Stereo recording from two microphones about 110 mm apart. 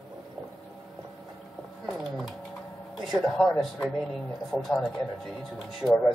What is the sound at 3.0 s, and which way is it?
Speech, centre (ahead or behind).